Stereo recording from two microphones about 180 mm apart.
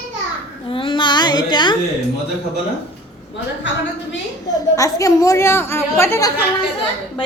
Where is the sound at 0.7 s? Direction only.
30° left (ahead or behind).